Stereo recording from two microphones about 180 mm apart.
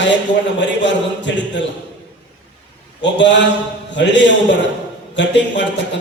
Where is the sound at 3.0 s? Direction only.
80° left.